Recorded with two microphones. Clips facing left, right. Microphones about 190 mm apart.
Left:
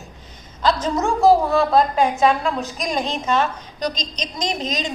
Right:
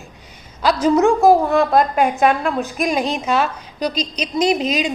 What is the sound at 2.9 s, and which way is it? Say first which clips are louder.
A woman's voice: even; 10° right (ahead or behind).